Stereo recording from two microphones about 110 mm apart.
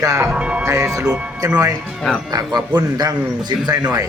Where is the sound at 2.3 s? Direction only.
40° right (ahead or behind).